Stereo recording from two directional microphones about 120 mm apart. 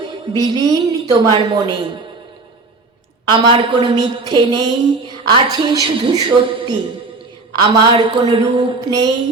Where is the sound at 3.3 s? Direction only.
40° right (ahead or behind).